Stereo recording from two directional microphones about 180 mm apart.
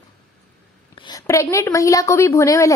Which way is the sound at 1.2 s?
15° left (ahead or behind).